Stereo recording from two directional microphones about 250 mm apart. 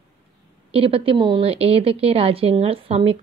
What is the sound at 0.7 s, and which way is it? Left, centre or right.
A woman's voice, right.